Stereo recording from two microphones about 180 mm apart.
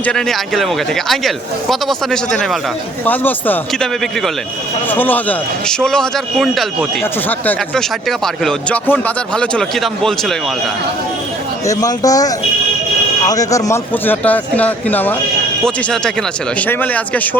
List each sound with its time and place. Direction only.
0.0 s speech: 5° left (ahead or behind)
11.6 s a man's voice: 20° left (ahead or behind)